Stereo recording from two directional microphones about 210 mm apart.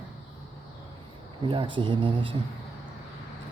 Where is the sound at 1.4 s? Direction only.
25° right (ahead or behind).